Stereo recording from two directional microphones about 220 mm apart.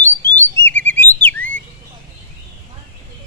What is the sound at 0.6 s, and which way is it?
Chirp, 10° left (ahead or behind).